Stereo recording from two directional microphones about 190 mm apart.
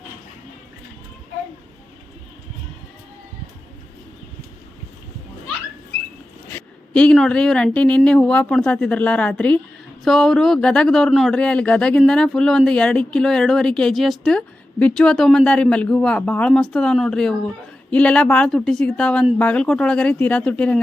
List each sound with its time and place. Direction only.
6.5 s speech: 5° left (ahead or behind)